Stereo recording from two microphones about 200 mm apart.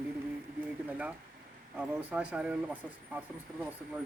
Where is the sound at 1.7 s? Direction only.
5° right (ahead or behind).